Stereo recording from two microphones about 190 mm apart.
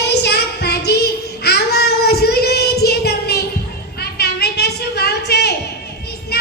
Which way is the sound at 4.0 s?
55° left (ahead or behind).